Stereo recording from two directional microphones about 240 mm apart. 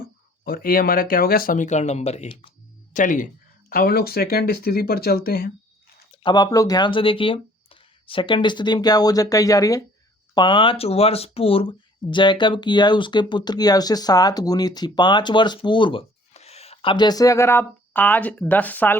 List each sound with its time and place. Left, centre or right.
0.4 s speech: left
6.1 s speech: centre